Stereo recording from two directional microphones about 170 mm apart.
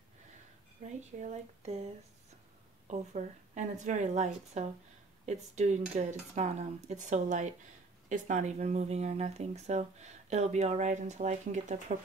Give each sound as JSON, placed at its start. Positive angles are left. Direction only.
{"t": 0.8, "sound": "speech", "side_deg": -45}
{"t": 2.9, "sound": "a woman's voice", "side_deg": -45}